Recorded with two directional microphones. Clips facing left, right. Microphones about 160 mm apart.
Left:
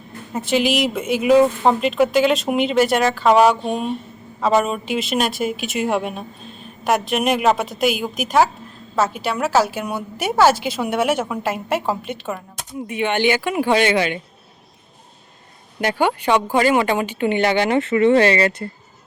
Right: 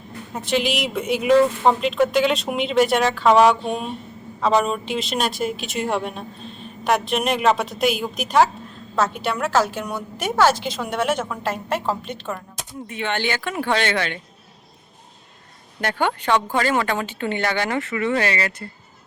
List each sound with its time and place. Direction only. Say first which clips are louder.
0.3 s a woman's voice: left 4 dB; 5° left (ahead or behind)
15.8 s a woman's voice: left 4 dB; 10° left (ahead or behind); by 18.7 s 25° left (ahead or behind)